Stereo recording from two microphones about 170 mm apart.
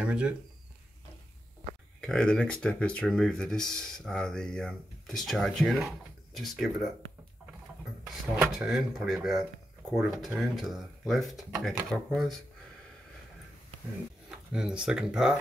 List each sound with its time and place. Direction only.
0.0 s speech: 5° right (ahead or behind)
2.0 s speech: 5° left (ahead or behind)
8.0 s speech: 5° right (ahead or behind)
14.5 s speech: 5° right (ahead or behind)